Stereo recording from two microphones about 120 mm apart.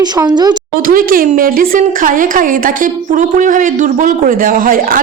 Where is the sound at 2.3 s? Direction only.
90° right.